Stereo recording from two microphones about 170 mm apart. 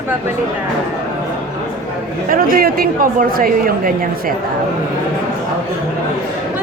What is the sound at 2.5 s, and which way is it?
A woman's voice, 60° right (ahead or behind).